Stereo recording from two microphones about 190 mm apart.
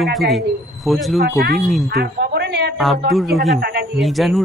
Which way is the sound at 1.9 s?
55° right (ahead or behind).